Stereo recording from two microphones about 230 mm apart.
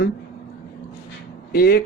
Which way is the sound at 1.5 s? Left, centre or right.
Left.